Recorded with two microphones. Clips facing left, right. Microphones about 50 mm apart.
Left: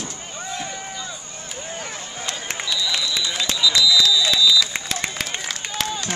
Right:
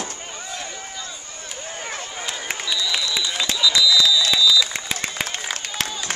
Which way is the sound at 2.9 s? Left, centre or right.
Centre.